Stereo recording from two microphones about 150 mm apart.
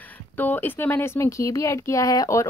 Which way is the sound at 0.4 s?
15° left (ahead or behind).